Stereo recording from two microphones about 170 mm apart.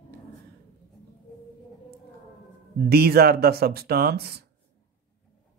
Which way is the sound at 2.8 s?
70° right (ahead or behind).